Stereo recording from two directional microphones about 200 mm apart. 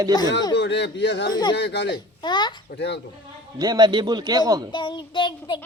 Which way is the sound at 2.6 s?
60° left (ahead or behind).